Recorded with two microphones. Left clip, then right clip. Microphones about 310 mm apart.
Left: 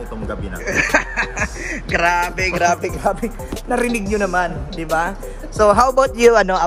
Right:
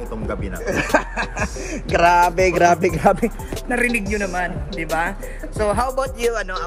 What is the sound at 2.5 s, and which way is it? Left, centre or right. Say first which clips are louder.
Music: right 2 dB; right.